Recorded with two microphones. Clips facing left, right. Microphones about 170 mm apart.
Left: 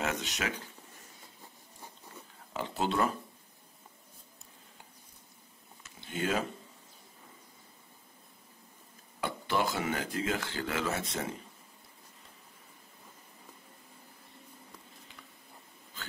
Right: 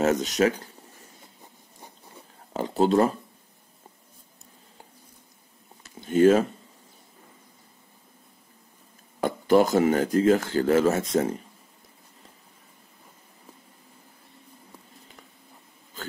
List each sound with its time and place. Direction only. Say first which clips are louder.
0.0 s speech: right 13 dB; 40° right (ahead or behind)
2.5 s speech: right 11 dB; 40° right (ahead or behind)
5.9 s speech: right 15 dB; 45° right (ahead or behind)
9.2 s speech: right 12 dB; 45° right (ahead or behind)